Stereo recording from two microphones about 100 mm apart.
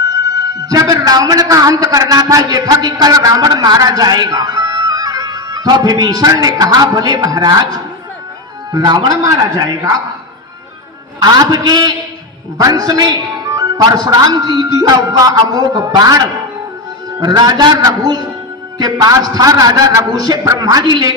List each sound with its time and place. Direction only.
0.0 s a man's voice: 35° right (ahead or behind)
11.2 s a man's voice: 40° right (ahead or behind)